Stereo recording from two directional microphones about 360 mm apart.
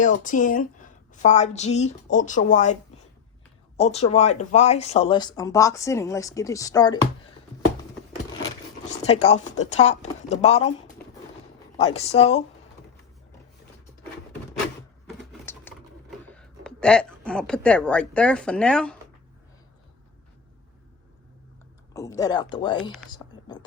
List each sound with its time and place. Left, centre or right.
0.0 s speech: left
3.8 s speech: centre
8.4 s speech: centre
11.8 s speech: centre
15.3 s typing: centre
21.9 s speech: centre
23.1 s whispering: centre